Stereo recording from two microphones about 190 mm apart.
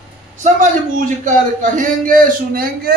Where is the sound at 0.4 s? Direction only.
40° right (ahead or behind).